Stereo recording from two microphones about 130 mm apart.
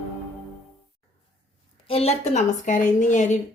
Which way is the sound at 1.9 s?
50° left (ahead or behind).